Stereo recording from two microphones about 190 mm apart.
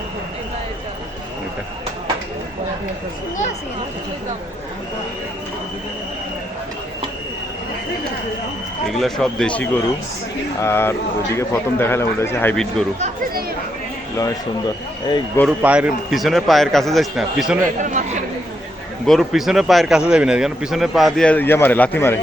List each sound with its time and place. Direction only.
8.9 s a man's voice: centre (ahead or behind)
15.4 s a man's voice: 5° right (ahead or behind)
17.7 s speech: 40° right (ahead or behind)
19.0 s a man's voice: centre (ahead or behind)